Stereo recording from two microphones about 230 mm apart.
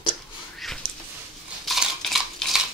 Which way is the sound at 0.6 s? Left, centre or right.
Centre.